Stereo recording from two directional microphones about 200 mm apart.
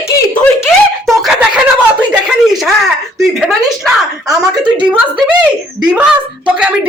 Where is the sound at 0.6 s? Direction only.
Centre (ahead or behind).